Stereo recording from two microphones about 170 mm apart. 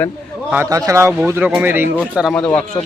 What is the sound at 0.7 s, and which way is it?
Speech, 15° right (ahead or behind).